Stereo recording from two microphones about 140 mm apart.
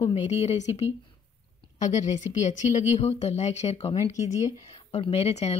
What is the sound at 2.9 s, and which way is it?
Speech, 50° left (ahead or behind).